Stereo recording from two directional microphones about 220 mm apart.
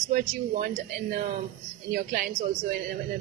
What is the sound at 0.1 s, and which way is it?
A man's voice, 35° right (ahead or behind).